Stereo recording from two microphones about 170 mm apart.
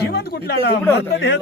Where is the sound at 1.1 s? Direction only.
90° left.